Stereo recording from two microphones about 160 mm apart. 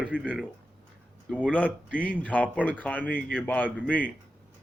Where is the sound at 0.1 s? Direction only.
5° left (ahead or behind).